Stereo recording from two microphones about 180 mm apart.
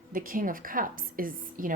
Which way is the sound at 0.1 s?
50° right (ahead or behind).